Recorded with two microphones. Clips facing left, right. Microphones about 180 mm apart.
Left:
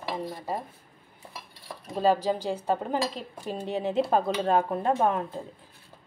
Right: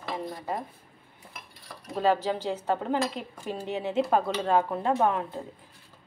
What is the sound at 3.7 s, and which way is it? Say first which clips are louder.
Speech: left 1 dB; 35° left (ahead or behind).